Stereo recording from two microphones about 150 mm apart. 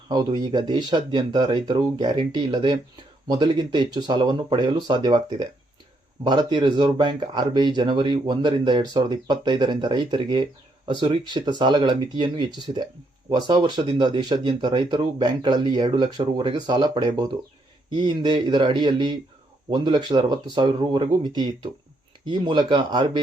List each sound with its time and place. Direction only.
0.1 s speech: 30° right (ahead or behind)